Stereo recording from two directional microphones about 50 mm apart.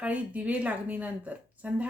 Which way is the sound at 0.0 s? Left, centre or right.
Right.